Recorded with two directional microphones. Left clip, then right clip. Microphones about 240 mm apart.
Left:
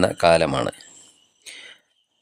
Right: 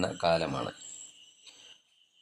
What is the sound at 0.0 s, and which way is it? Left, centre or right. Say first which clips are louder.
Speech: left 11 dB; left.